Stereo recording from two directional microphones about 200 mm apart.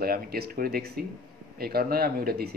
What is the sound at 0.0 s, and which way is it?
Speech, 50° right (ahead or behind).